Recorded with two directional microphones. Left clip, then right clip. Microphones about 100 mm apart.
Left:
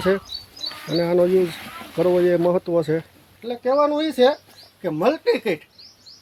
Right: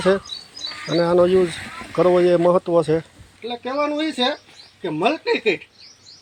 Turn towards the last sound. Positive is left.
turn(degrees=55)  # may be behind; listen again after turning